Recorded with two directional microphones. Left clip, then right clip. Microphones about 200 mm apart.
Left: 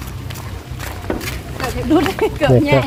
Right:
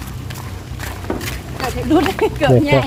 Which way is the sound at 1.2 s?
15° left (ahead or behind).